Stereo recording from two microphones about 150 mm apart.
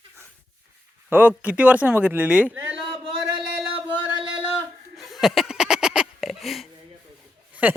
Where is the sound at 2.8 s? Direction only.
35° right (ahead or behind).